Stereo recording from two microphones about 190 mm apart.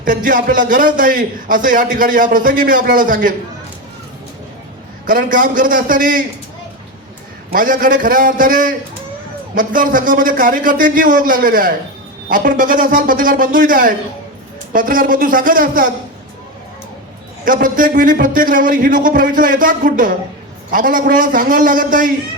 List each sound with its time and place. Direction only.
0.0 s a man's voice: 45° right (ahead or behind)
5.0 s a man's voice: 45° right (ahead or behind)
7.5 s a man's voice: 45° right (ahead or behind)
17.4 s a man's voice: 45° right (ahead or behind)